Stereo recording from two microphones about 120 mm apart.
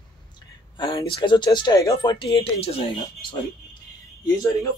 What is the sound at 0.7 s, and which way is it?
Speech, 40° left (ahead or behind).